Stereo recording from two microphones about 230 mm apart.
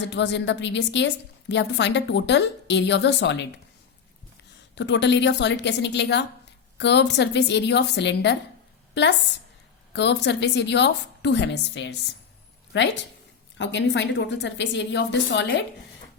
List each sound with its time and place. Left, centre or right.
0.1 s a woman's voice: left
4.7 s a woman's voice: left
9.9 s a woman's voice: left